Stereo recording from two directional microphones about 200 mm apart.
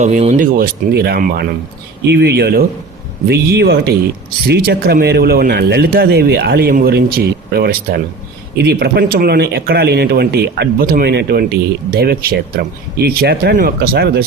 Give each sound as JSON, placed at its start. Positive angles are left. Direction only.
{"t": 0.0, "sound": "speech", "side_deg": -35}